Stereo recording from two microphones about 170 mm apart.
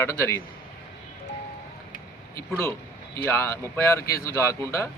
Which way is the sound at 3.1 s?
15° left (ahead or behind).